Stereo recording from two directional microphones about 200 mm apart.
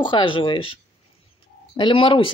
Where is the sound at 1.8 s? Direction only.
25° left (ahead or behind).